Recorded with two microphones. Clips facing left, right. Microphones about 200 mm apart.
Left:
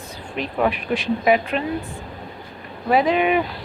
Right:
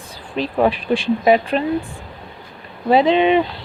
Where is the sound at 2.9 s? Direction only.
25° right (ahead or behind).